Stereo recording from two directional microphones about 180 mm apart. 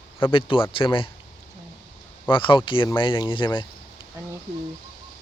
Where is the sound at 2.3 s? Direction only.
30° left (ahead or behind).